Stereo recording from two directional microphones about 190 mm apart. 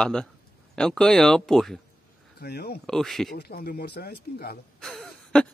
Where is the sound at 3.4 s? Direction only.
55° left (ahead or behind).